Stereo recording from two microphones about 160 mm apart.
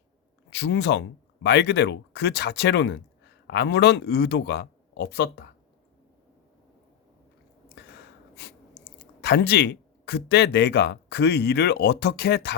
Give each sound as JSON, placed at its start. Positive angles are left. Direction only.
{"t": 0.5, "sound": "speech", "side_deg": 90}
{"t": 7.8, "sound": "gasp", "side_deg": 90}
{"t": 8.4, "sound": "a sound", "side_deg": 90}
{"t": 9.2, "sound": "speech", "side_deg": 90}